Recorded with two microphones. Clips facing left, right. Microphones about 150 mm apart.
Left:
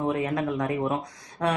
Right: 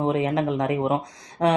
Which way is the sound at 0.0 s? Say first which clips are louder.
Right 4 dB; 20° right (ahead or behind).